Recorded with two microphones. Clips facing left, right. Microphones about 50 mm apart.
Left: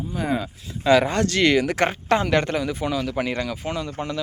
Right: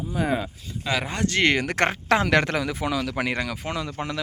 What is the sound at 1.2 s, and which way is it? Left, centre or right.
Speech, right.